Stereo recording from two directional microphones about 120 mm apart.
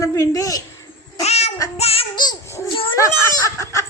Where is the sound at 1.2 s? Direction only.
60° left (ahead or behind).